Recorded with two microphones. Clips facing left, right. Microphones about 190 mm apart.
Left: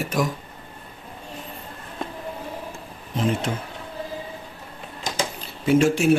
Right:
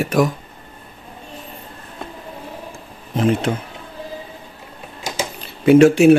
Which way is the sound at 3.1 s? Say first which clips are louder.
Right 6 dB; 65° right (ahead or behind).